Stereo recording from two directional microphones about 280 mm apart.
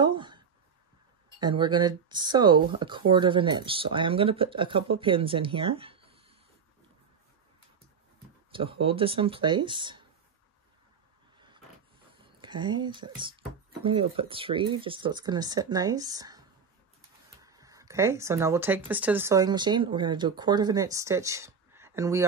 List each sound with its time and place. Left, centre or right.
0.0 s speech: centre
1.4 s speech: centre
8.5 s speech: centre
11.3 s vehicle: centre
12.4 s speech: centre